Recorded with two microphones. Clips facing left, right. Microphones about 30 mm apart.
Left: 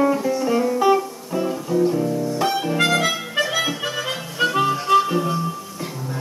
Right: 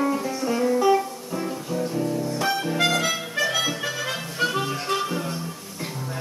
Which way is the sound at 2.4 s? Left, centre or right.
Centre.